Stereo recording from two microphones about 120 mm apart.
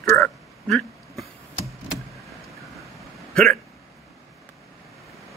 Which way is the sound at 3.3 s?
5° left (ahead or behind).